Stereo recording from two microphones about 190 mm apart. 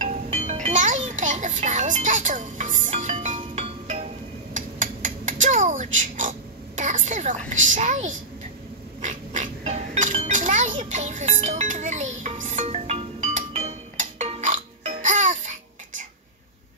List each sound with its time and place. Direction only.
0.0 s music: 35° right (ahead or behind)
4.6 s a sound: 45° right (ahead or behind)
7.7 s a child's voice: 40° right (ahead or behind)
9.0 s music: 40° right (ahead or behind)